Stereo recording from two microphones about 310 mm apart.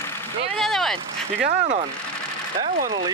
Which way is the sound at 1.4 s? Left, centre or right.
Right.